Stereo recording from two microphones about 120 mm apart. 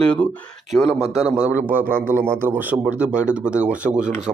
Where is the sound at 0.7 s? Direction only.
5° right (ahead or behind).